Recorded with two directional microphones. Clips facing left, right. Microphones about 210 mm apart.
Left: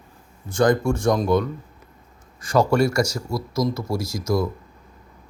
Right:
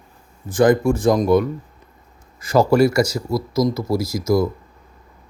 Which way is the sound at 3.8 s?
Centre (ahead or behind).